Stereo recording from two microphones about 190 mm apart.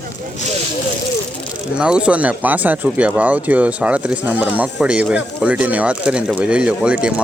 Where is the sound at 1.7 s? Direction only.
5° right (ahead or behind).